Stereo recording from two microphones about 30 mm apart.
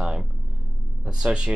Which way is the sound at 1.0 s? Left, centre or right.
Right.